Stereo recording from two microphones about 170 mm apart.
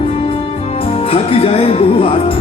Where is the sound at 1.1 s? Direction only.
35° left (ahead or behind).